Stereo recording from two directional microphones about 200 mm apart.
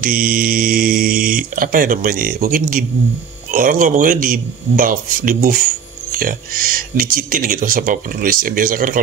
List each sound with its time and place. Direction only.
0.0 s speech: 45° right (ahead or behind)